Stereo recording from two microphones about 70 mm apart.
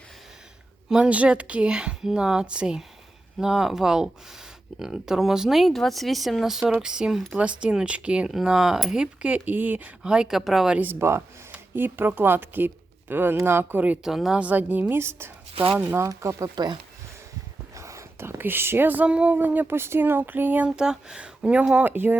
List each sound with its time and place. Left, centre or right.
0.9 s speech: centre
8.3 s speech: centre; by 9.9 s right
10.0 s speech: centre
10.8 s speech: right
14.0 s speech: centre
14.3 s a sound: right
14.9 s speech: right
17.7 s speech: right
19.0 s a sound: centre
20.7 s speech: centre
21.8 s a sound: right